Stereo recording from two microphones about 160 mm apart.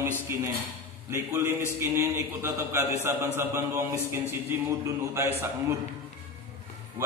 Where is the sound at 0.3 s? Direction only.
15° right (ahead or behind).